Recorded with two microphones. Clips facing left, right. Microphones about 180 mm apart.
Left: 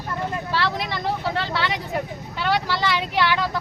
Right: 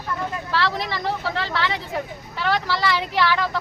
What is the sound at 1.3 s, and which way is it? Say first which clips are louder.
Speech: even; 15° left (ahead or behind).